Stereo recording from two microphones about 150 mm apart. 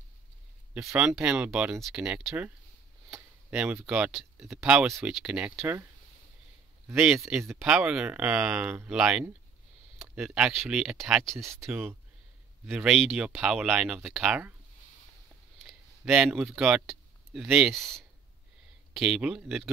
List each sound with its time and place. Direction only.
0.9 s speech: 5° right (ahead or behind)
7.3 s speech: 5° right (ahead or behind)
11.3 s speech: 20° right (ahead or behind)
15.6 s a sound: 5° right (ahead or behind)
16.3 s speech: 5° right (ahead or behind)
18.9 s speech: 5° right (ahead or behind)